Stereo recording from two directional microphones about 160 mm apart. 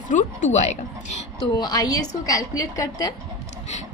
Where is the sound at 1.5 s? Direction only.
25° left (ahead or behind).